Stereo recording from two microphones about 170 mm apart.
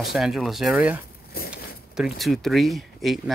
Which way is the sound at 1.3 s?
60° left (ahead or behind).